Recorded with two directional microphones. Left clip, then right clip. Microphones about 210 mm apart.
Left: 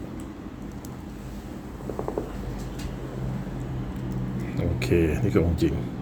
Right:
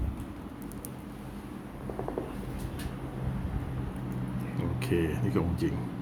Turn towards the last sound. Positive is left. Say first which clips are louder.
# left 7 dB
turn(degrees=10)  # may be behind; listen again after turning